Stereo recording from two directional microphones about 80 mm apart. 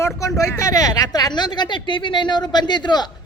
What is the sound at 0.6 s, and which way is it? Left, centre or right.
Speech, left.